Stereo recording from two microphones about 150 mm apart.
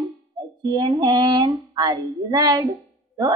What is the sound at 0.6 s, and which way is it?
Speech, 25° right (ahead or behind).